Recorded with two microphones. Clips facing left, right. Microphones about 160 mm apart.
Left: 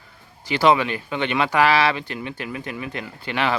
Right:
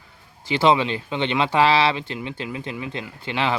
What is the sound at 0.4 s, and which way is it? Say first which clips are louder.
Speech: even; 25° right (ahead or behind).